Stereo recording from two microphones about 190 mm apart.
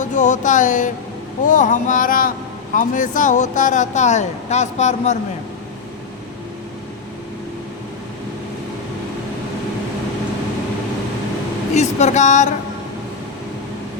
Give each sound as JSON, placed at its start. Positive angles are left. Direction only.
{"t": 0.0, "sound": "speech", "side_deg": 40}
{"t": 1.5, "sound": "a sound", "side_deg": 45}
{"t": 2.7, "sound": "speech", "side_deg": 45}
{"t": 11.7, "sound": "speech", "side_deg": 35}